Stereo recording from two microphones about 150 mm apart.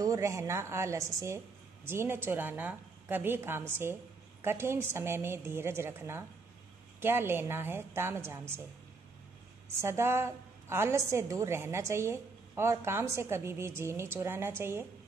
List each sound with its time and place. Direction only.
0.0 s a woman's voice: 20° right (ahead or behind)
9.8 s a woman's voice: 15° right (ahead or behind)